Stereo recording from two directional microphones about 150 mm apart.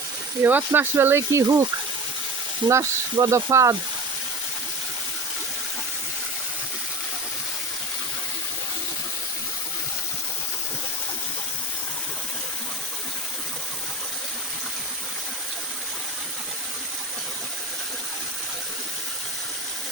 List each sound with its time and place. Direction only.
0.4 s speech: 10° right (ahead or behind)
2.6 s speech: 20° right (ahead or behind)